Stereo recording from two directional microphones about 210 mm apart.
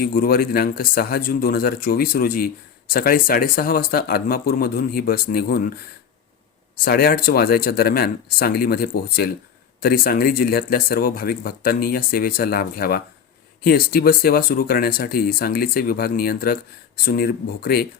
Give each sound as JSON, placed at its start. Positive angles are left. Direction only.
{"t": 0.0, "sound": "speech", "side_deg": 45}
{"t": 6.8, "sound": "speech", "side_deg": 45}